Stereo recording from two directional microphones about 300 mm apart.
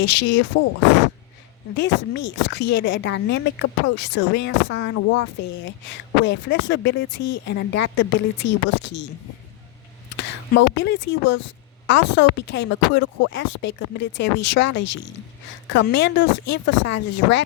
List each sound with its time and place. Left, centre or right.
0.0 s speech: left
1.7 s speech: left
6.2 s speech: left
10.2 s speech: left